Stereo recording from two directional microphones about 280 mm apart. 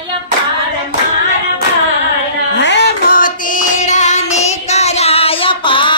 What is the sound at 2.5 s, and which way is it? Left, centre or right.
Music, left.